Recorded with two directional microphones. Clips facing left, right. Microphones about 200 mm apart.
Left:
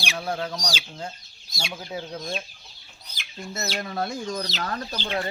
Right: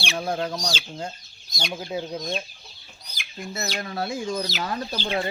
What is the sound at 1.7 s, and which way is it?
Speech, 20° right (ahead or behind).